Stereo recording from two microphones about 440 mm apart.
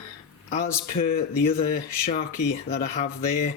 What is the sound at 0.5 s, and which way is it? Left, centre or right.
Speech, centre.